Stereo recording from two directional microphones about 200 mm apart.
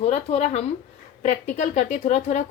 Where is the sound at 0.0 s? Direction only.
30° left (ahead or behind).